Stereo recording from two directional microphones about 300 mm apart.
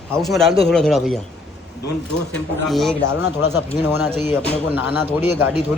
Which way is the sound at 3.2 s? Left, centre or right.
Left.